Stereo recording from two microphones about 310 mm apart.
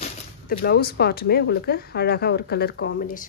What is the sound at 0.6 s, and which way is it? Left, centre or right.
A woman's voice, left.